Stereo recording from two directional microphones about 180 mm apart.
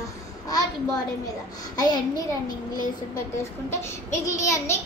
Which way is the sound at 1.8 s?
20° left (ahead or behind).